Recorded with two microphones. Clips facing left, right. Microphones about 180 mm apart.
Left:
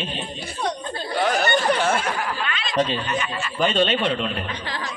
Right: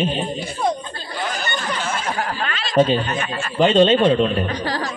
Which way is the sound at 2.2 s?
45° right (ahead or behind).